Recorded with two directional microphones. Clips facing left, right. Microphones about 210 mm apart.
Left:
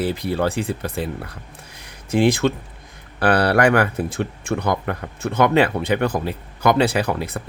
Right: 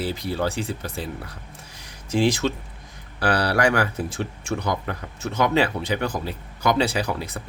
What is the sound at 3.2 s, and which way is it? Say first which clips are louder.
Speech: left 5 dB; 55° left (ahead or behind).